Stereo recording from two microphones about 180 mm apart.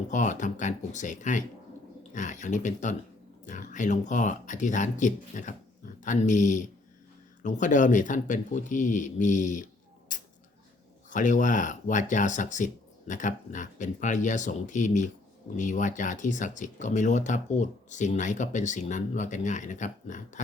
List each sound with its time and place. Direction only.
0.1 s speech: 45° left (ahead or behind)
10.1 s a sound: 45° left (ahead or behind)
11.1 s speech: 45° left (ahead or behind)